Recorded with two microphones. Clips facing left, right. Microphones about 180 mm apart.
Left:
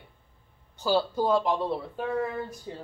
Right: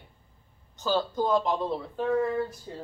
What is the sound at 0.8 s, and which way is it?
Speech, 10° left (ahead or behind).